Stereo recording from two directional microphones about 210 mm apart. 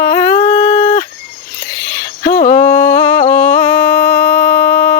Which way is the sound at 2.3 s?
20° left (ahead or behind).